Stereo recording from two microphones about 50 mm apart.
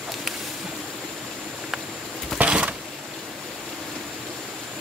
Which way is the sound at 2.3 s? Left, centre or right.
Right.